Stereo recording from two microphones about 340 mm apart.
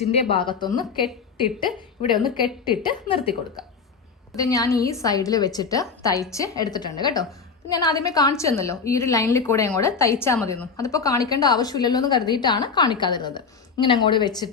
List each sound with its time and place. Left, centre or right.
0.0 s a woman's voice: centre
4.4 s a woman's voice: centre